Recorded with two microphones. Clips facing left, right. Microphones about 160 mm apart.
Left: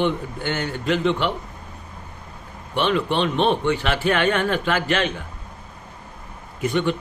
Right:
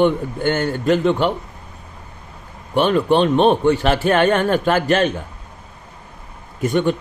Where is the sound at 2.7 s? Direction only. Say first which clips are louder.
Right 6 dB; 45° right (ahead or behind).